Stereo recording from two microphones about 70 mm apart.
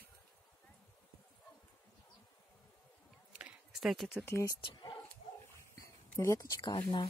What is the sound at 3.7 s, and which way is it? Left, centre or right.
Speech, centre.